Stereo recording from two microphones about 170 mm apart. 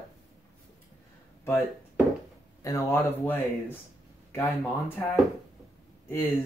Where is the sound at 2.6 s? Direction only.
15° left (ahead or behind).